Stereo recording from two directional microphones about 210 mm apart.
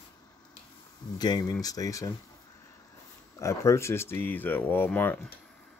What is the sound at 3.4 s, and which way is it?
Speech, 15° left (ahead or behind).